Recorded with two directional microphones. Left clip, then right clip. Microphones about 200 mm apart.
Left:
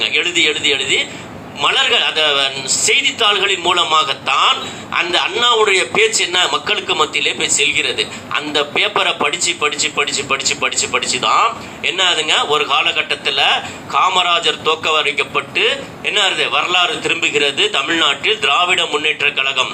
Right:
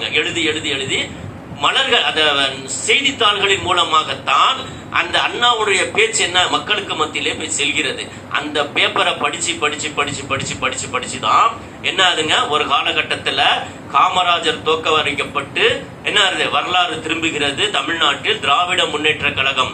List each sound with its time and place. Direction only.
0.0 s a man's voice: 45° left (ahead or behind)